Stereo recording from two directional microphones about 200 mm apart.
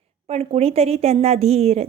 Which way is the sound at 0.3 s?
30° right (ahead or behind).